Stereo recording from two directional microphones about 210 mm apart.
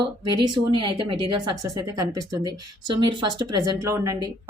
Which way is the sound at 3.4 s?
15° right (ahead or behind).